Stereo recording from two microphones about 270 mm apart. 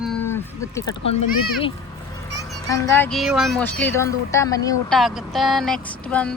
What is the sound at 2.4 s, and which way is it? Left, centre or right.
Speech, centre.